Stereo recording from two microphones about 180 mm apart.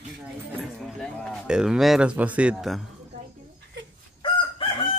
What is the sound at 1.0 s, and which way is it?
A man's voice, 5° left (ahead or behind).